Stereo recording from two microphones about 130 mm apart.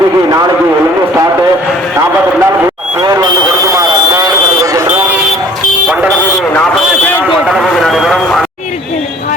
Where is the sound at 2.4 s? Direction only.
15° right (ahead or behind).